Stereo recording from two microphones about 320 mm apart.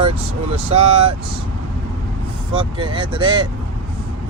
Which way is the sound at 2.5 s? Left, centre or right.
Centre.